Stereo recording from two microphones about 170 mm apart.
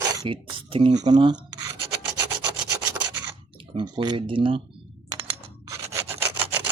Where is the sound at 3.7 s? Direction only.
25° right (ahead or behind).